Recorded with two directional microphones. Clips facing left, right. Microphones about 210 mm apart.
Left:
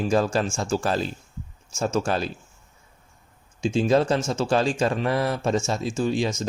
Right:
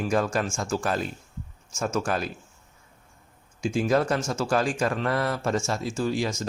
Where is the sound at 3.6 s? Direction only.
25° left (ahead or behind).